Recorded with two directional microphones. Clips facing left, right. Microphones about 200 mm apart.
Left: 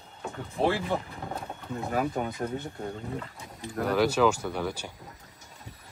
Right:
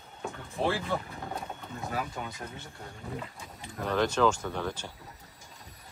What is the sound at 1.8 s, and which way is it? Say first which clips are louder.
Speech: left 7 dB; 50° left (ahead or behind).